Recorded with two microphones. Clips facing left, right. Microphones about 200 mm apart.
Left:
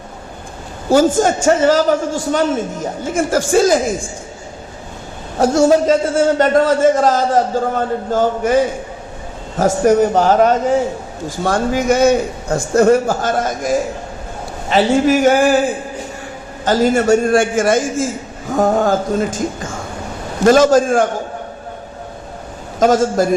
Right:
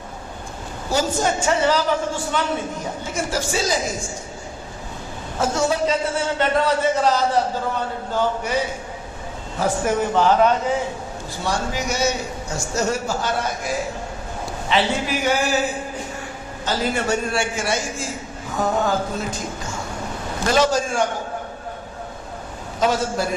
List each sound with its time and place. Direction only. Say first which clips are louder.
0.9 s a man's voice: left 9 dB; 50° left (ahead or behind)
5.6 s a man's voice: left 9 dB; 45° left (ahead or behind)
16.6 s a man's voice: left 10 dB; 45° left (ahead or behind)
22.8 s a man's voice: left 8 dB; 45° left (ahead or behind)